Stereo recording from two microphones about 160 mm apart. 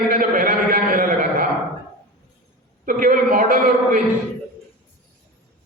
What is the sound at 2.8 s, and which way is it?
A man's voice, 60° right (ahead or behind).